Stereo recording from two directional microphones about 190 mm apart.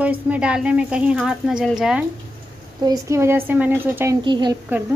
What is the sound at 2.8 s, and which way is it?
Speech, 15° right (ahead or behind).